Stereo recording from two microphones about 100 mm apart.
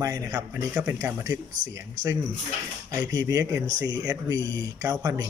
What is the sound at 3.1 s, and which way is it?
Speech, 35° right (ahead or behind).